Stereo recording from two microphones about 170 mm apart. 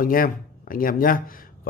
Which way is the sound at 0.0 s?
55° left (ahead or behind).